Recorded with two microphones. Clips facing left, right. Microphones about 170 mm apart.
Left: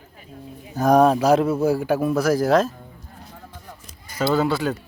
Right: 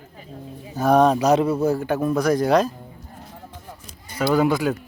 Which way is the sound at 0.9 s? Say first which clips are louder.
Left 1 dB; 5° left (ahead or behind).